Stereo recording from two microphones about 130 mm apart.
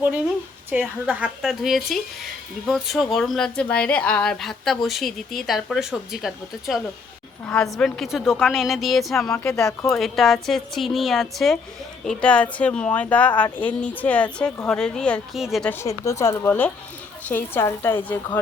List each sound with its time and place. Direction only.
0.7 s a woman's voice: 10° right (ahead or behind)
15.7 s a woman's voice: 20° left (ahead or behind)